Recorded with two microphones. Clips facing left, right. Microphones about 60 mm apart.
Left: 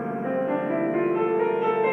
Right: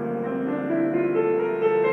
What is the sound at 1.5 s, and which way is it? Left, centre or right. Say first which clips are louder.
Music: right 2 dB; left.